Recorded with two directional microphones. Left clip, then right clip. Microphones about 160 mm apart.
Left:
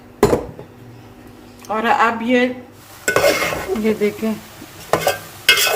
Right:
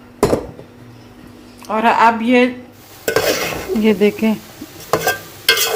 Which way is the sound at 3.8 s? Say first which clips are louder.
Right 6 dB; 35° right (ahead or behind).